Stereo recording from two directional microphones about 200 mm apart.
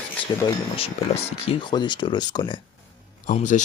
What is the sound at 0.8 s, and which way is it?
Speech, 30° left (ahead or behind).